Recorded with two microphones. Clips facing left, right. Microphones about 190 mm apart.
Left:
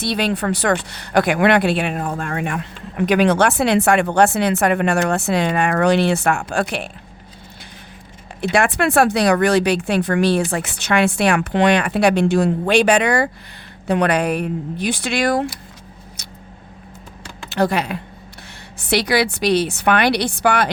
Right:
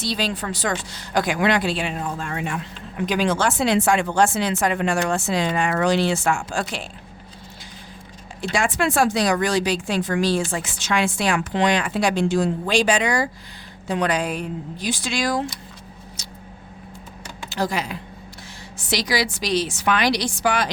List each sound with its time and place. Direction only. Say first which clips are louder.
0.0 s a woman's voice: left 5 dB; 60° left (ahead or behind)
8.4 s a woman's voice: left 5 dB; 65° left (ahead or behind)
17.5 s a woman's voice: left 6 dB; 60° left (ahead or behind)